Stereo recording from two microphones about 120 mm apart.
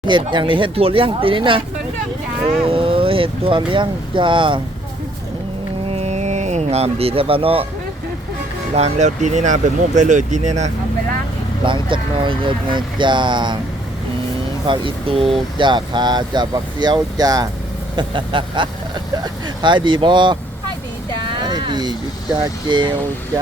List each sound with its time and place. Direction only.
0.1 s speech: 40° right (ahead or behind)
2.6 s speech: 45° right (ahead or behind)
5.9 s a sound: 65° right (ahead or behind)
8.7 s speech: 70° right (ahead or behind)
11.6 s speech: 45° right (ahead or behind)
14.7 s speech: 50° right (ahead or behind); by 17.5 s 30° right (ahead or behind)
17.9 s speech: 45° right (ahead or behind)
21.4 s vehicle: 40° right (ahead or behind)